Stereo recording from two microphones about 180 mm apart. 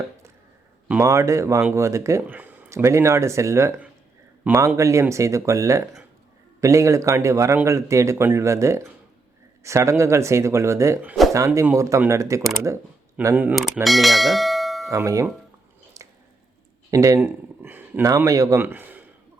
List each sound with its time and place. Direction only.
0.9 s speech: 15° right (ahead or behind)
13.1 s bell: 10° right (ahead or behind)
14.8 s speech: 20° right (ahead or behind)
16.0 s squish: 20° right (ahead or behind)
16.9 s speech: 15° right (ahead or behind)